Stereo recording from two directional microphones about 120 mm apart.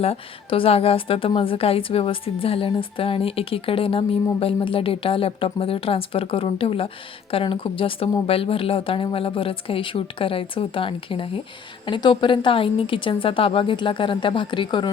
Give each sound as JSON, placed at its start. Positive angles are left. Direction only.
{"t": 0.0, "sound": "a woman's voice", "side_deg": 55}